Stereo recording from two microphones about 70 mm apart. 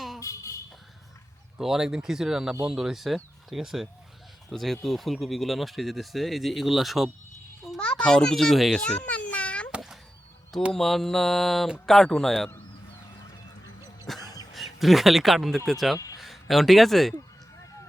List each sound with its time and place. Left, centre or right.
0.2 s vehicle: left
1.5 s speech: centre
7.8 s a child's voice: centre
8.8 s a sound: centre
10.7 s speech: centre
14.2 s throat clearing: left
14.5 s speech: centre